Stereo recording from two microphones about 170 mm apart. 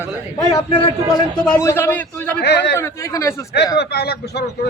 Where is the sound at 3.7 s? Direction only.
70° left (ahead or behind).